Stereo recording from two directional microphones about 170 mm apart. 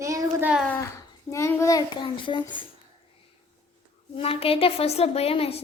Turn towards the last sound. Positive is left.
turn(degrees=35)  # may be behind; listen again after turning